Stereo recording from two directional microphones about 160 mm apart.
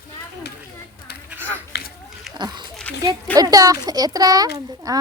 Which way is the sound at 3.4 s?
20° right (ahead or behind).